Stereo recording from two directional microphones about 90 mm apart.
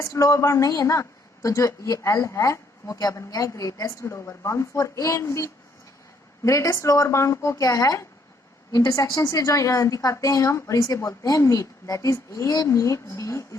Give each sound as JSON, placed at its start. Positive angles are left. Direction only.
{"t": 0.0, "sound": "a woman's voice", "side_deg": 35}